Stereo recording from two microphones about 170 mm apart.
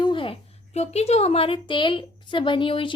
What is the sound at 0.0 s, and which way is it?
A woman's voice, 30° left (ahead or behind).